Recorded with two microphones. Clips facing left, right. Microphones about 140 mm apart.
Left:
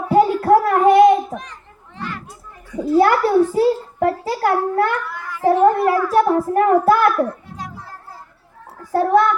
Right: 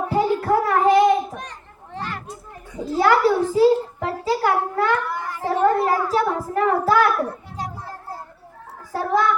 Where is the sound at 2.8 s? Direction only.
55° left (ahead or behind).